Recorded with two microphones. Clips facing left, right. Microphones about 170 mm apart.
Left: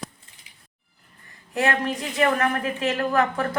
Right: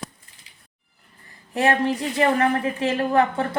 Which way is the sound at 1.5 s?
30° right (ahead or behind).